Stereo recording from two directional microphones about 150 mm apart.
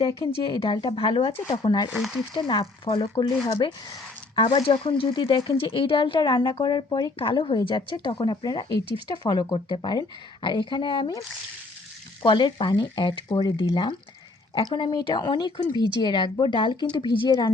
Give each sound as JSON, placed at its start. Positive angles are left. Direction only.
{"t": 0.4, "sound": "speech", "side_deg": 35}
{"t": 1.9, "sound": "speech", "side_deg": 0}
{"t": 2.3, "sound": "speech", "side_deg": 35}
{"t": 12.2, "sound": "speech", "side_deg": 35}